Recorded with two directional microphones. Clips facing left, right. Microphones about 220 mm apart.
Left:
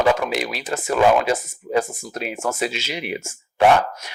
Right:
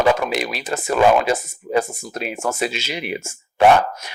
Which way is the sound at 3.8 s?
25° right (ahead or behind).